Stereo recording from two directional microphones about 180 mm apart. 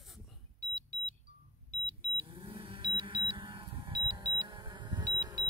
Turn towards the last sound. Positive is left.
turn(degrees=-20)  # may be behind; listen again after turning